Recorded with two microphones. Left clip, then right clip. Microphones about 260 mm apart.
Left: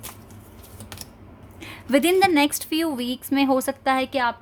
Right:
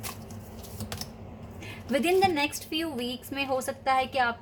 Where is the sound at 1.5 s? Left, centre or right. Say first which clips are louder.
Left 8 dB; left.